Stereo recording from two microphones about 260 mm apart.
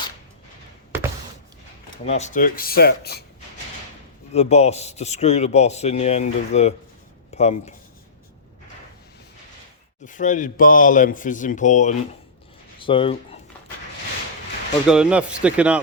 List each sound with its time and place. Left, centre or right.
2.0 s speech: left
4.3 s a man's voice: left
10.0 s a man's voice: left
14.8 s speech: centre